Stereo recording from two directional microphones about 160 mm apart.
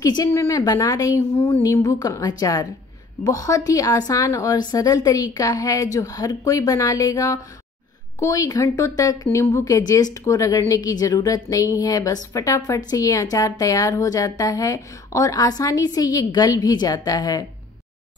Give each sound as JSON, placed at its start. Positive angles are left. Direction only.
{"t": 0.0, "sound": "a woman's voice", "side_deg": 20}